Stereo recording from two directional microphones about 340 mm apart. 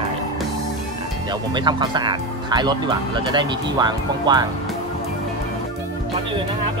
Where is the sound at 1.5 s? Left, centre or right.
Centre.